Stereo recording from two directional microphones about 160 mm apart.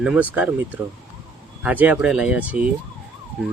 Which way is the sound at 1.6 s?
10° right (ahead or behind).